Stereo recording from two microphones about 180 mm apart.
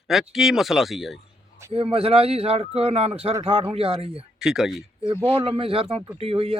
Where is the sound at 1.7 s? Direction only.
30° right (ahead or behind).